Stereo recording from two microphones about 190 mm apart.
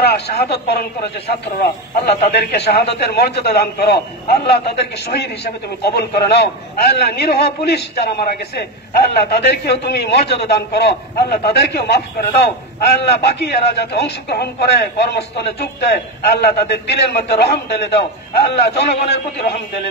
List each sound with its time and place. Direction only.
0.0 s a man's voice: 55° left (ahead or behind)